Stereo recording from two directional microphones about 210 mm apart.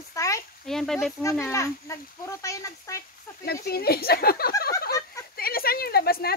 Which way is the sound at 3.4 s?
50° left (ahead or behind).